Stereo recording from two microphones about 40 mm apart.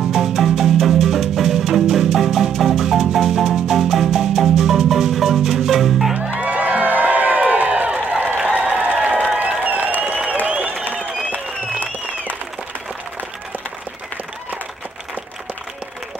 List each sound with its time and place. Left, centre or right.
0.1 s music: centre
3.6 s marimba: centre
5.6 s music: centre
6.4 s crowd: right
8.4 s a sound: right
10.0 s applause: right